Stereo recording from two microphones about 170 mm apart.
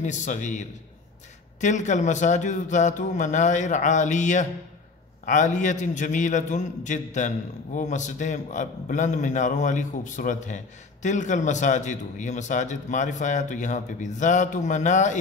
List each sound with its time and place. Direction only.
0.0 s a man's voice: 45° left (ahead or behind)